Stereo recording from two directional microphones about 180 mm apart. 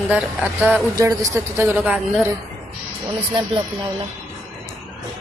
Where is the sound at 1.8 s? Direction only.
Centre (ahead or behind).